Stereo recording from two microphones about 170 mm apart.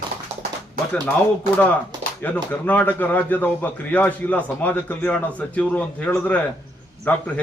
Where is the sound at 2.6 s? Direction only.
10° left (ahead or behind).